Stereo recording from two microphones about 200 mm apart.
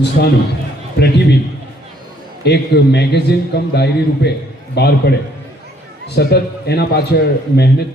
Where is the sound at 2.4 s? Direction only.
55° left (ahead or behind).